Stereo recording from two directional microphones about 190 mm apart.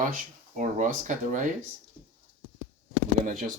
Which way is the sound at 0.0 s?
45° right (ahead or behind).